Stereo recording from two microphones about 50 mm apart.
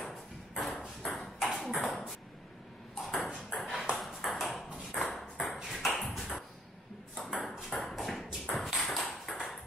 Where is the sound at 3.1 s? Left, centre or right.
Centre.